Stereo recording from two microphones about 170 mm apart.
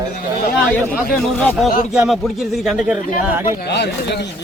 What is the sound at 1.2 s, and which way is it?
Speech, centre (ahead or behind).